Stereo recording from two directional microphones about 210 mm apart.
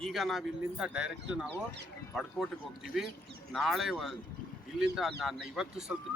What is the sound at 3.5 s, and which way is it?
Speech, centre (ahead or behind).